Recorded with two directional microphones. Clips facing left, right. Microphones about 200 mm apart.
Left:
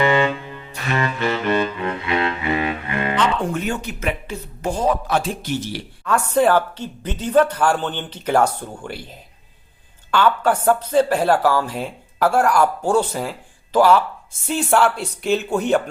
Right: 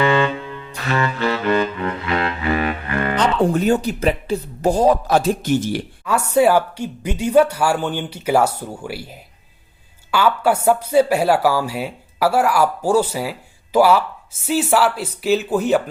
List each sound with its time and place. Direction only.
0.9 s music: 20° left (ahead or behind)
3.2 s speech: 35° right (ahead or behind)
6.1 s speech: 10° right (ahead or behind)